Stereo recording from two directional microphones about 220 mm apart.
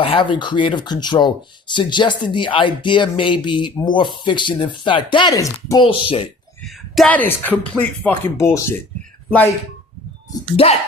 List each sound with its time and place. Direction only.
0.0 s speech: 25° left (ahead or behind)
6.9 s speech: 5° left (ahead or behind)
10.3 s speech: 25° left (ahead or behind)